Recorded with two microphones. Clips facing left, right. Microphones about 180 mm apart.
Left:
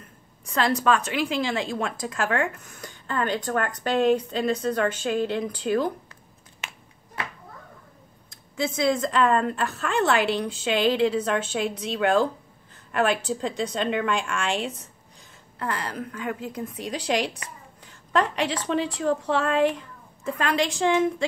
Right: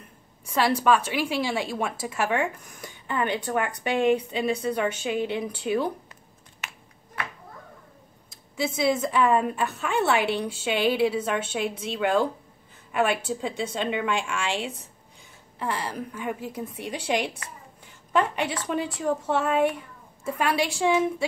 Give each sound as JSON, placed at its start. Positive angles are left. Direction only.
{"t": 0.5, "sound": "a woman's voice", "side_deg": -10}
{"t": 8.5, "sound": "a woman's voice", "side_deg": -10}
{"t": 18.1, "sound": "a woman's voice", "side_deg": -5}